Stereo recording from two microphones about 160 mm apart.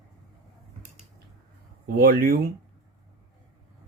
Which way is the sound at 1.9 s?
65° right (ahead or behind).